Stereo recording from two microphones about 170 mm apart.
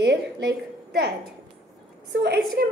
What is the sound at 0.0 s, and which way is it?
A woman's voice, 70° right (ahead or behind).